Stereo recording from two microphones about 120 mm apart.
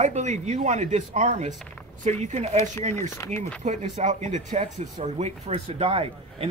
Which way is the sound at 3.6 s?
85° right.